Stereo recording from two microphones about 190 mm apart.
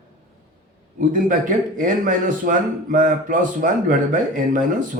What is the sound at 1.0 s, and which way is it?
Speech, 45° right (ahead or behind).